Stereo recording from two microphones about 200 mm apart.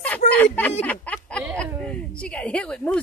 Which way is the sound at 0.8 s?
10° left (ahead or behind).